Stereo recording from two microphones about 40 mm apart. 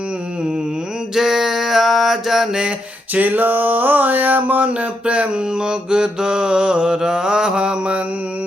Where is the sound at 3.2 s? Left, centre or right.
Right.